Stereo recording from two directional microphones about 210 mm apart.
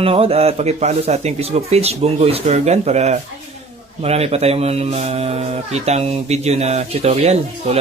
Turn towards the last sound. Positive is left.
turn(degrees=-30)  # may be behind; listen again after turning